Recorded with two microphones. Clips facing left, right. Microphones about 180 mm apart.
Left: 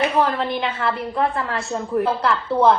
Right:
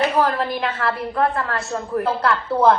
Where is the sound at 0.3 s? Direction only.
Centre (ahead or behind).